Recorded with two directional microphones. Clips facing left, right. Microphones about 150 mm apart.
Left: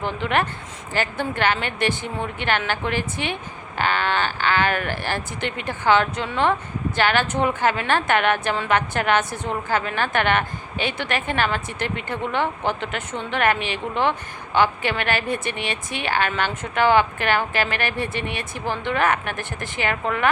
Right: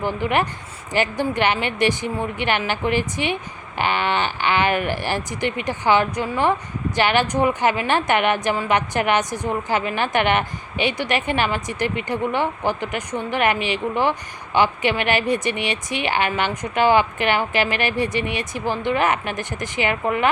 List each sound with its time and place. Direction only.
0.0 s a woman's voice: 10° right (ahead or behind)
18.2 s speech: 50° left (ahead or behind)
18.5 s a woman's voice: 15° right (ahead or behind)